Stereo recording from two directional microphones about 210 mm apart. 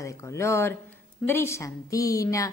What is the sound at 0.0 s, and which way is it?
A woman's voice, 15° left (ahead or behind).